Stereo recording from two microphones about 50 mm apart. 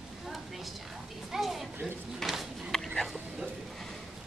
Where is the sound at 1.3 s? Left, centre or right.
Centre.